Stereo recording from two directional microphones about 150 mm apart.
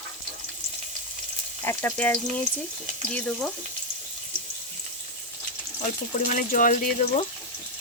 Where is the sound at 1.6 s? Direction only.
15° left (ahead or behind).